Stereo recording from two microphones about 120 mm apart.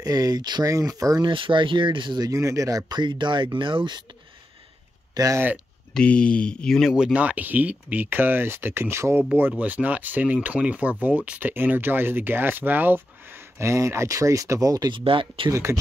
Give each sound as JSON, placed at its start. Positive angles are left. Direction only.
{"t": 0.0, "sound": "speech", "side_deg": -30}
{"t": 1.3, "sound": "speech", "side_deg": -45}
{"t": 5.1, "sound": "speech", "side_deg": -30}
{"t": 5.9, "sound": "speech", "side_deg": 10}
{"t": 15.0, "sound": "speech", "side_deg": -50}
{"t": 15.5, "sound": "speech", "side_deg": -25}